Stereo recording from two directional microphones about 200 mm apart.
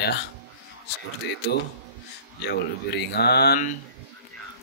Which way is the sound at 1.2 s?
55° left (ahead or behind).